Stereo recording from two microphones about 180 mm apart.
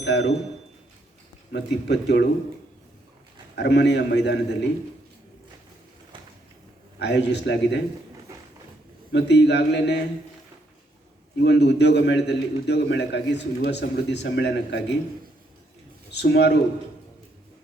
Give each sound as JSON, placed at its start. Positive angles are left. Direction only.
{"t": 0.0, "sound": "a man's voice", "side_deg": 75}
{"t": 1.5, "sound": "a man's voice", "side_deg": 70}
{"t": 3.5, "sound": "a man's voice", "side_deg": 70}
{"t": 7.0, "sound": "a man's voice", "side_deg": 70}
{"t": 9.1, "sound": "a man's voice", "side_deg": 70}
{"t": 11.3, "sound": "a man's voice", "side_deg": 70}
{"t": 16.1, "sound": "a man's voice", "side_deg": 70}